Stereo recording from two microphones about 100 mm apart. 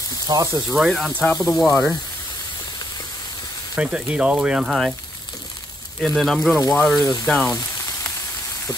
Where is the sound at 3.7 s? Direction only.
10° right (ahead or behind).